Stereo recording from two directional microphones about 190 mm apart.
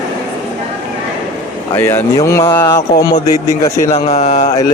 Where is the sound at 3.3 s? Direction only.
15° right (ahead or behind).